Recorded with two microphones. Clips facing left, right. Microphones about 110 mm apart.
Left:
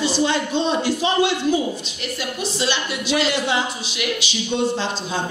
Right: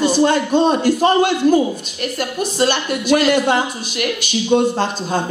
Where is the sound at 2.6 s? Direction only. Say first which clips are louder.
Right 8 dB; 50° right (ahead or behind).